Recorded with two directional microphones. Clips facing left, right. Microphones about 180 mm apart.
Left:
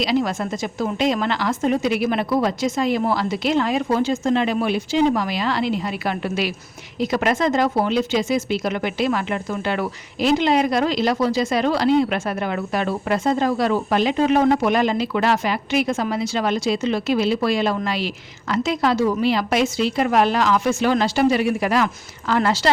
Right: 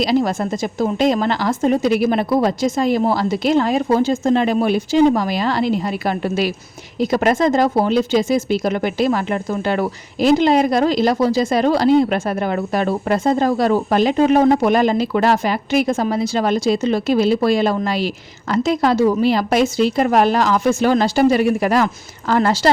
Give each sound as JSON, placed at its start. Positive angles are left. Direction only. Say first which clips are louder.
{"t": 0.0, "sound": "speech", "louder": "right 4 dB", "side_deg": -40}